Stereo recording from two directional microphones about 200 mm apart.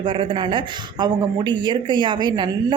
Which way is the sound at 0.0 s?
25° right (ahead or behind).